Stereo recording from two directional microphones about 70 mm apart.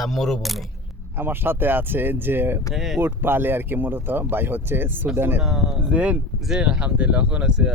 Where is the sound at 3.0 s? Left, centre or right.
Right.